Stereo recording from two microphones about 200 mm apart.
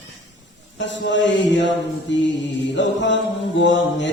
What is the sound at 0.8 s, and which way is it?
A man's voice, 65° left (ahead or behind).